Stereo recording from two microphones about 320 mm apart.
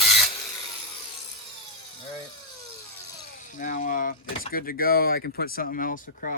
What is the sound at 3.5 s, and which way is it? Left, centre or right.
Speech, left.